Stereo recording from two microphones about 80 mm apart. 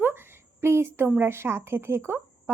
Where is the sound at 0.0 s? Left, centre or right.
Right.